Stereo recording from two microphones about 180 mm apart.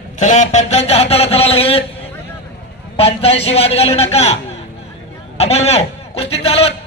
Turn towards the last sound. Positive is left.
turn(degrees=35)  # may be behind; listen again after turning